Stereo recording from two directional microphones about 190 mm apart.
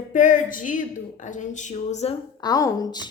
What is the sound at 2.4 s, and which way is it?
Speech, 20° left (ahead or behind).